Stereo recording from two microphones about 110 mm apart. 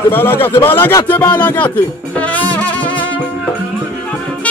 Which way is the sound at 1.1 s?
15° left (ahead or behind).